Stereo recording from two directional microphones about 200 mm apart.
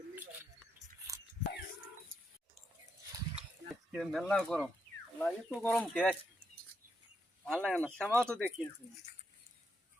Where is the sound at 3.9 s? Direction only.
Centre (ahead or behind).